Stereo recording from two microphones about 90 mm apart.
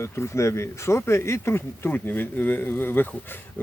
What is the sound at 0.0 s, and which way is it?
Speech, 30° left (ahead or behind).